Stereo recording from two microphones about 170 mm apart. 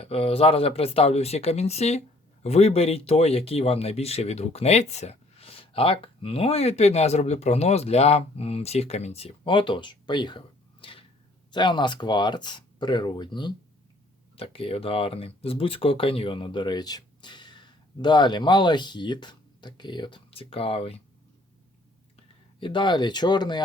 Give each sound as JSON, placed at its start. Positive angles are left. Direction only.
{"t": 0.0, "sound": "speech", "side_deg": 35}
{"t": 22.6, "sound": "speech", "side_deg": 30}